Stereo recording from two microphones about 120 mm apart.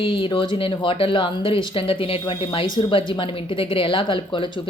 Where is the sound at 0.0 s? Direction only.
45° left (ahead or behind).